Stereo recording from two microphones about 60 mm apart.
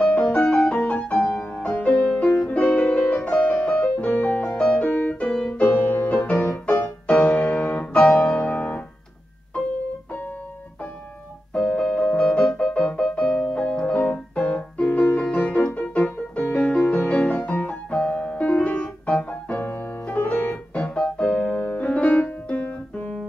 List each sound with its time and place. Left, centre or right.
0.0 s music: left
4.0 s music: left
4.5 s music: centre
4.8 s music: left
7.1 s music: left
11.5 s music: centre
15.3 s piano: left
16.5 s music: centre
17.5 s piano: left
20.9 s keyboard: centre
21.4 s music: left